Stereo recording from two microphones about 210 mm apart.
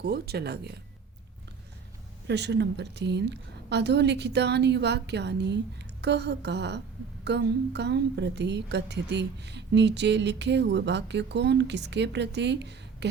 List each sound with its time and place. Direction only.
0.0 s a woman's voice: 50° right (ahead or behind)
2.2 s a woman's voice: 55° right (ahead or behind)